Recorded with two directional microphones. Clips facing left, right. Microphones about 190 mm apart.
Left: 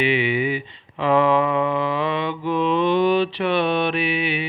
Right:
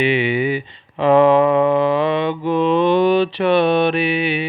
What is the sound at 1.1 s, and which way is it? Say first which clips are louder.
Mantra: right 6 dB; 30° right (ahead or behind).